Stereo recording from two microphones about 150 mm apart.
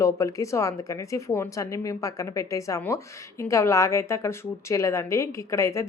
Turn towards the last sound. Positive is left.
turn(degrees=20)  # may be behind; listen again after turning